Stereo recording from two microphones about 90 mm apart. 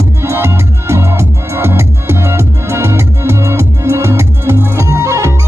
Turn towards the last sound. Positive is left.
turn(degrees=-30)  # may be behind; listen again after turning